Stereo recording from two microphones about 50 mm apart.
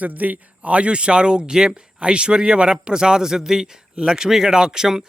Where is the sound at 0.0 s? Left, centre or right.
Right.